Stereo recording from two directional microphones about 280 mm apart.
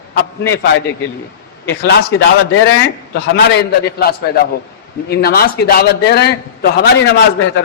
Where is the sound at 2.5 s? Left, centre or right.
Left.